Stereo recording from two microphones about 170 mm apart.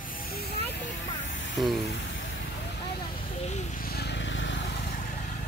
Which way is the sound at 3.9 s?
85° left.